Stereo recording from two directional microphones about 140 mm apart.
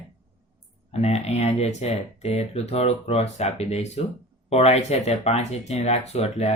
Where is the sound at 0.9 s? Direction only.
50° left (ahead or behind).